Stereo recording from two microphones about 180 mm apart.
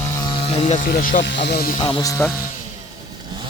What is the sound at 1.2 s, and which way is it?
Speech, 75° left (ahead or behind).